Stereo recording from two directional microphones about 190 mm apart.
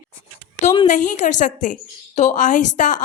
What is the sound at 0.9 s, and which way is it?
A woman's voice, 40° left (ahead or behind).